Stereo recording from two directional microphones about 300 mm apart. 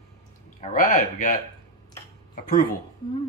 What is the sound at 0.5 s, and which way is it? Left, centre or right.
Speech, left.